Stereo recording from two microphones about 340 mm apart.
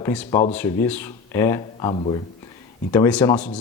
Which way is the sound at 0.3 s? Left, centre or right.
Centre.